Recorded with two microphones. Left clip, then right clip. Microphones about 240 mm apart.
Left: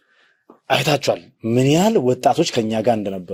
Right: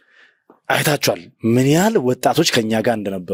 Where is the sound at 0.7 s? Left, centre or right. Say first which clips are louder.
Even; right.